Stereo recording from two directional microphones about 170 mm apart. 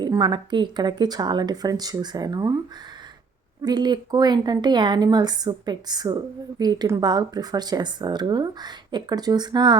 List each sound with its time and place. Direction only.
0.0 s speech: 25° right (ahead or behind)
3.6 s speech: 25° right (ahead or behind)